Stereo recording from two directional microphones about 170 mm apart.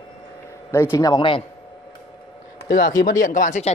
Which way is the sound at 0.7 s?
15° left (ahead or behind).